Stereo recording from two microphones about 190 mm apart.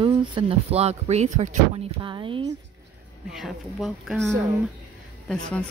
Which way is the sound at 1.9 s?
25° right (ahead or behind).